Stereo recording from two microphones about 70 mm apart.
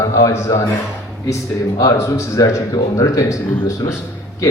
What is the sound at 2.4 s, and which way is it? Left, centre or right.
Speech, left.